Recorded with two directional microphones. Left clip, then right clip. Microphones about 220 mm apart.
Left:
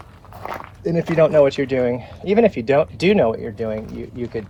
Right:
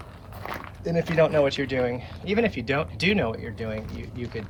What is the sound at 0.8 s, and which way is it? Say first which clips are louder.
Speech: left 5 dB; 30° left (ahead or behind).